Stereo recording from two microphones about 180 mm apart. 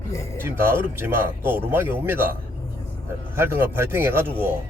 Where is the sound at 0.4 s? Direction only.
15° right (ahead or behind).